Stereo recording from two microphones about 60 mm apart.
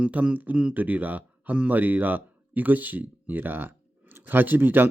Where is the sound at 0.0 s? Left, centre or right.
Right.